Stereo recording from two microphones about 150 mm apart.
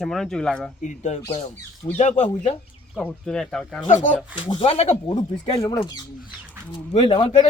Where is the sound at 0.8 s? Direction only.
55° left (ahead or behind).